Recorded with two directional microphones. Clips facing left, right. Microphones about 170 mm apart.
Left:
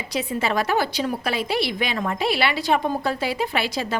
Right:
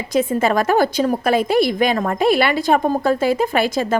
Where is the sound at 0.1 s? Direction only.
50° right (ahead or behind).